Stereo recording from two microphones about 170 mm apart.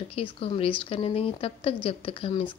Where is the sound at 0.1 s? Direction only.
35° left (ahead or behind).